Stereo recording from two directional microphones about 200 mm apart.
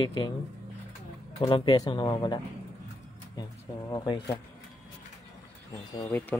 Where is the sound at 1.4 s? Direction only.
25° left (ahead or behind).